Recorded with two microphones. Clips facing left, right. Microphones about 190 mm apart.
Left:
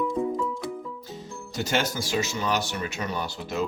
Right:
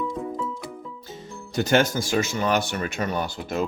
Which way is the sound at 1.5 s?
55° right (ahead or behind).